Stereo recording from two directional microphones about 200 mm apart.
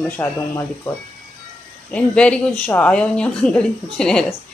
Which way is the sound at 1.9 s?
5° left (ahead or behind).